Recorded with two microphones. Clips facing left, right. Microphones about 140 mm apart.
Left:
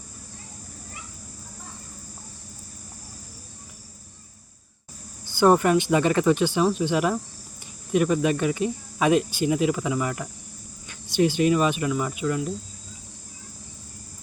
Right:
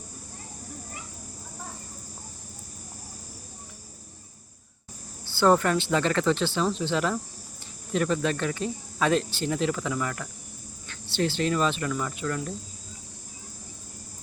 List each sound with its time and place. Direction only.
5.2 s speech: 15° left (ahead or behind)